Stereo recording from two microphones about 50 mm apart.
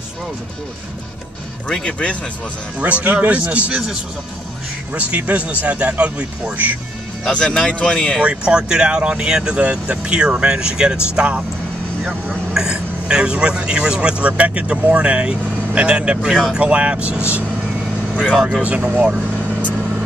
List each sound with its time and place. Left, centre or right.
1.7 s speech: centre
2.8 s speech: right
4.9 s speech: right
7.2 s speech: centre
8.2 s speech: right
12.5 s speech: centre
18.6 s speech: right